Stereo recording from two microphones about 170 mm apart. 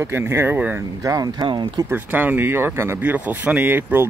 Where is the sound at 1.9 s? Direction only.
10° right (ahead or behind).